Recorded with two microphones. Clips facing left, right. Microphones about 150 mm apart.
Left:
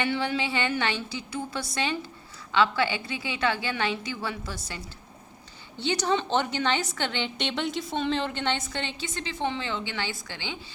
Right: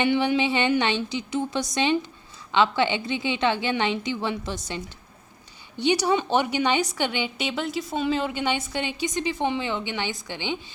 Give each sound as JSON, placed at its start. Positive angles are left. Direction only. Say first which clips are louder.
{"t": 0.0, "sound": "a woman's voice", "louder": "right 6 dB", "side_deg": -15}
{"t": 5.8, "sound": "a woman's voice", "louder": "right 4 dB", "side_deg": -15}